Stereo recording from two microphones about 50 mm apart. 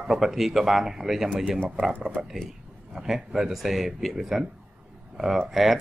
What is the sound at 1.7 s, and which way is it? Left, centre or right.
Speech, right.